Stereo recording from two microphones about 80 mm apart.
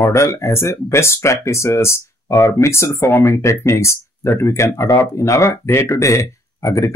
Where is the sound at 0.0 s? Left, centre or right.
Left.